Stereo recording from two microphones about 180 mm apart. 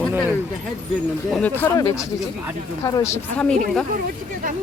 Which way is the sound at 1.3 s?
10° left (ahead or behind).